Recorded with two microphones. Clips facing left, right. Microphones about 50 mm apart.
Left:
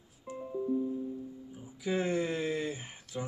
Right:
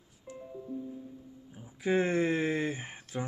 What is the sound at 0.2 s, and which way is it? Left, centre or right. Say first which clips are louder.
Music: left 4 dB; centre.